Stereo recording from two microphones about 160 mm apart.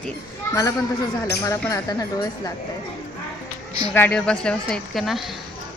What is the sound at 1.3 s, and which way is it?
Speech, 20° left (ahead or behind).